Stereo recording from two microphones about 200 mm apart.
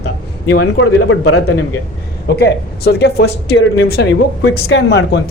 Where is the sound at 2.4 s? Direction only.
55° left (ahead or behind).